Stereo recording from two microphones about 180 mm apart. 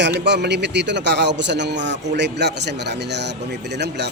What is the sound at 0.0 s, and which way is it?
A man's voice, 70° right (ahead or behind).